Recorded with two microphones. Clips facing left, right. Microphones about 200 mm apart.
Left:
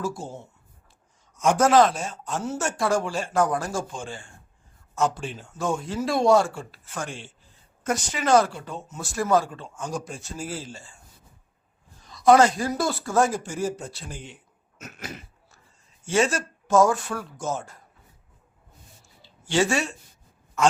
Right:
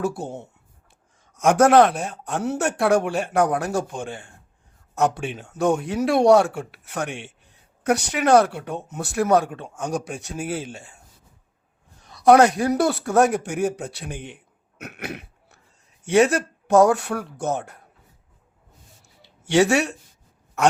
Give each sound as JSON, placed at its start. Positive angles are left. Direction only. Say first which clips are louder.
{"t": 0.0, "sound": "speech", "louder": "right 5 dB", "side_deg": -65}
{"t": 12.0, "sound": "speech", "louder": "right 3 dB", "side_deg": -60}
{"t": 14.8, "sound": "throat clearing", "louder": "right 5 dB", "side_deg": -60}
{"t": 16.0, "sound": "speech", "louder": "right 6 dB", "side_deg": -60}
{"t": 19.0, "sound": "a sound", "louder": "right 6 dB", "side_deg": -65}
{"t": 20.6, "sound": "quack", "louder": "right 2 dB", "side_deg": -65}